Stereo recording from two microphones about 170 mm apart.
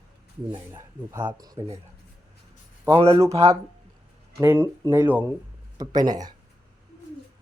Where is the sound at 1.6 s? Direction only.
30° right (ahead or behind).